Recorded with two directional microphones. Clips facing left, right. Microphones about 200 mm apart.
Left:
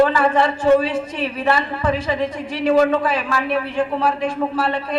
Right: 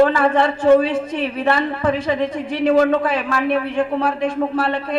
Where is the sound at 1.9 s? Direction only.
60° right (ahead or behind).